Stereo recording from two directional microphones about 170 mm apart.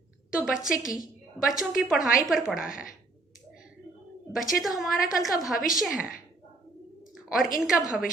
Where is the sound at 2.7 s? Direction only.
55° left (ahead or behind).